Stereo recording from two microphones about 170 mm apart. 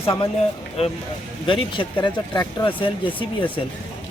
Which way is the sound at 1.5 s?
30° left (ahead or behind).